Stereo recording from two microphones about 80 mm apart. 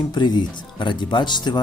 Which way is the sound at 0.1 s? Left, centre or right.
Left.